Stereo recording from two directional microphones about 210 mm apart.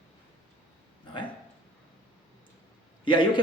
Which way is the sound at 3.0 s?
25° left (ahead or behind).